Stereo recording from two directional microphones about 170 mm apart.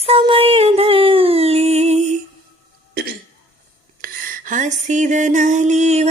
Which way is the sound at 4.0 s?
55° right (ahead or behind).